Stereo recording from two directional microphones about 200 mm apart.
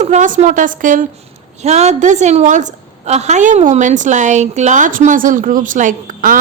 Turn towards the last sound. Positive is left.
turn(degrees=-40)  # may be behind; listen again after turning